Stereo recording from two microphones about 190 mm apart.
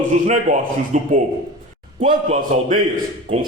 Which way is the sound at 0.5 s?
45° right (ahead or behind).